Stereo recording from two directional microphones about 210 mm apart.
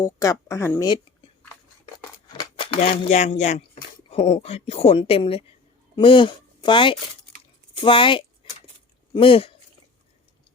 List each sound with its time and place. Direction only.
0.0 s speech: 15° left (ahead or behind)
2.4 s cutlery: 25° left (ahead or behind)
2.9 s a woman's voice: 35° left (ahead or behind)
8.4 s a sound: 25° left (ahead or behind)
9.1 s a woman's voice: 25° left (ahead or behind)